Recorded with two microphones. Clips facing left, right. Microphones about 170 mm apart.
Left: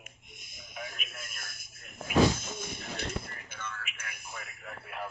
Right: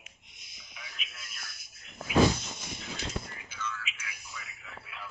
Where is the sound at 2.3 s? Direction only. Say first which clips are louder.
Left 3 dB; 50° left (ahead or behind).